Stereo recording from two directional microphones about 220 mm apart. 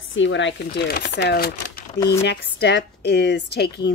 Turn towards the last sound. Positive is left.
turn(degrees=50)  # may be behind; listen again after turning